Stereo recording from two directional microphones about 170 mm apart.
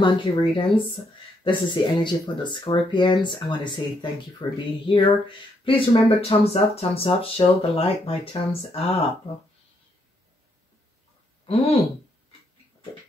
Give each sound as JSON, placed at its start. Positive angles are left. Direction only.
{"t": 0.0, "sound": "speech", "side_deg": 30}
{"t": 11.4, "sound": "speech", "side_deg": 35}